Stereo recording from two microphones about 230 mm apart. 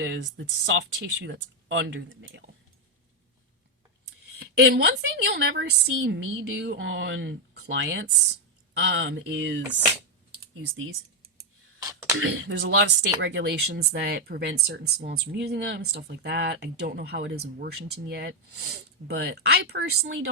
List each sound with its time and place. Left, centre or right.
0.0 s speech: right
4.4 s speech: right
10.3 s computer keyboard: right
11.8 s a sound: centre
12.2 s speech: right